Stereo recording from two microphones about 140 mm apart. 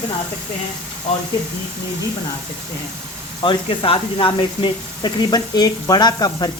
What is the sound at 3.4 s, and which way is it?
Speech, 35° left (ahead or behind).